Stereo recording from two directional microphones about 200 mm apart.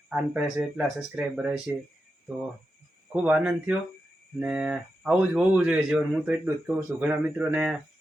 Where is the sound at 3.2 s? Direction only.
5° right (ahead or behind).